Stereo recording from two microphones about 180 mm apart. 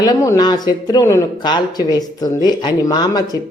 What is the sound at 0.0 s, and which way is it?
Speech, 20° left (ahead or behind).